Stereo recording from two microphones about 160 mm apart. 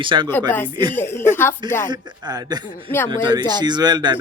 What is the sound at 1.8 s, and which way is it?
Speech, 25° right (ahead or behind).